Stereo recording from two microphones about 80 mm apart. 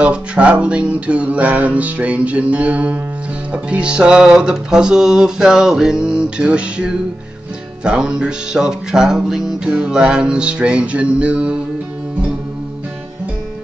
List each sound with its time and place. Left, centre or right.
0.0 s music: centre